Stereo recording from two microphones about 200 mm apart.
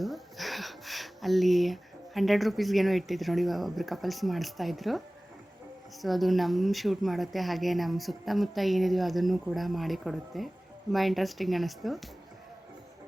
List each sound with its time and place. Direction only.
0.0 s speech: centre (ahead or behind)